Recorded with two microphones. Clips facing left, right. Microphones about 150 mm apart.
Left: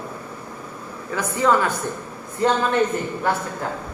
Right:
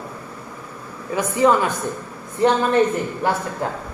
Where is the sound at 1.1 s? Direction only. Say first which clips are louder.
Right 3 dB; 15° right (ahead or behind).